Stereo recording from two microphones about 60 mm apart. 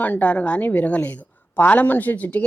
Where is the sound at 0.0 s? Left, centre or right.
Left.